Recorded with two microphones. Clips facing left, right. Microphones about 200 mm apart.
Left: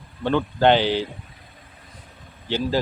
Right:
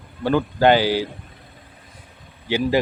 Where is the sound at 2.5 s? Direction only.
15° right (ahead or behind).